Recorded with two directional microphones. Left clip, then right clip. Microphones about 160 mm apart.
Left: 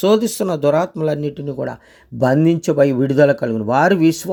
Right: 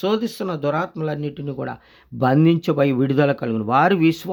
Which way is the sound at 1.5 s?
15° left (ahead or behind).